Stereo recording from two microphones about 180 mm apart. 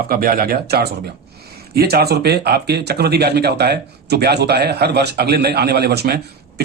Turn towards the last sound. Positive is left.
turn(degrees=-60)  # may be behind; listen again after turning